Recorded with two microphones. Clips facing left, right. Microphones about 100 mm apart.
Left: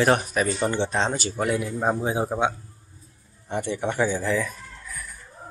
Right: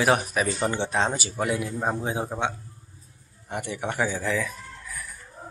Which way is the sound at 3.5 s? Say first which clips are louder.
Left 4 dB; 5° right (ahead or behind).